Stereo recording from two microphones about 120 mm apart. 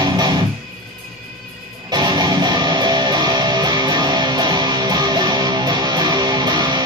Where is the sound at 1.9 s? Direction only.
35° right (ahead or behind).